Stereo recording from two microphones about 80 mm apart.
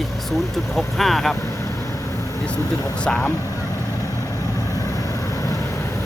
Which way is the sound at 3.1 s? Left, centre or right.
Centre.